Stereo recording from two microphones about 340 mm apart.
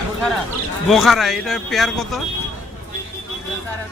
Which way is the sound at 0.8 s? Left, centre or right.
Centre.